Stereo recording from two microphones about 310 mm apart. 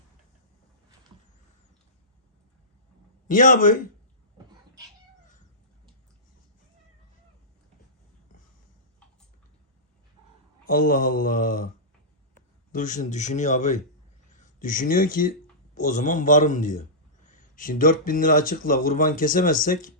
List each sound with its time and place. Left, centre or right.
3.2 s speech: left
10.7 s speech: left
12.7 s speech: left